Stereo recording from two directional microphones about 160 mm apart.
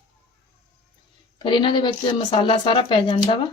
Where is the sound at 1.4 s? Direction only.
30° left (ahead or behind).